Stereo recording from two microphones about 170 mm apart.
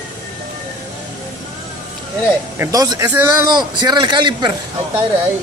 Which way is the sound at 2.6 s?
20° right (ahead or behind).